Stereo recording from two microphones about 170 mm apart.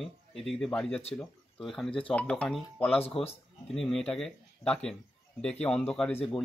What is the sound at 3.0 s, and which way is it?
Speech, 35° left (ahead or behind).